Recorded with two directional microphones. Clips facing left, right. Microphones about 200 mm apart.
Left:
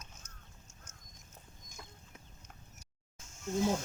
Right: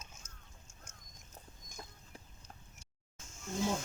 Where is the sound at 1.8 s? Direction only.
35° right (ahead or behind).